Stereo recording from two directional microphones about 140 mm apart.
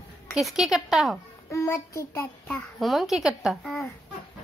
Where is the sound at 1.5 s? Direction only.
20° left (ahead or behind).